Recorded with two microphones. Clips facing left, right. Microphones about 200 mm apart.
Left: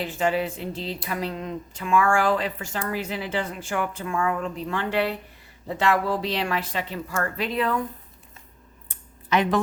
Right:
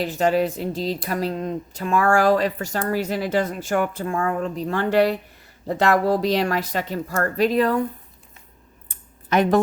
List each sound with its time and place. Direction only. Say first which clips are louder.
0.0 s speech: right 5 dB; 40° right (ahead or behind)
9.3 s speech: right 4 dB; 45° right (ahead or behind)